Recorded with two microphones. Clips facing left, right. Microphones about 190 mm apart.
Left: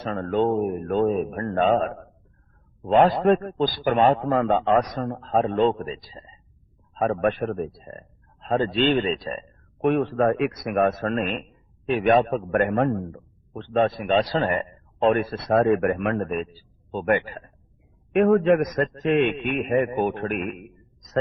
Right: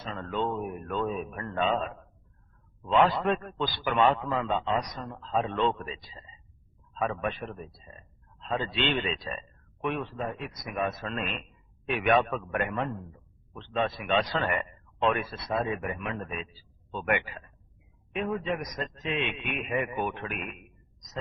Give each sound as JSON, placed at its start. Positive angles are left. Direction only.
{"t": 0.0, "sound": "a man's voice", "side_deg": 50}
{"t": 12.5, "sound": "a man's voice", "side_deg": 50}
{"t": 16.9, "sound": "a man's voice", "side_deg": 40}
{"t": 18.1, "sound": "a man's voice", "side_deg": 60}